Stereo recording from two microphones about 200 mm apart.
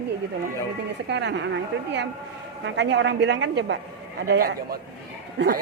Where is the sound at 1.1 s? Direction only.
60° right (ahead or behind).